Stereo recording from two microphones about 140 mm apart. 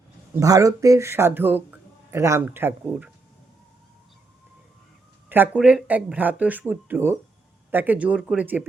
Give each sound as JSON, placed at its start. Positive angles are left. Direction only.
{"t": 0.3, "sound": "speech", "side_deg": -25}
{"t": 5.5, "sound": "speech", "side_deg": -5}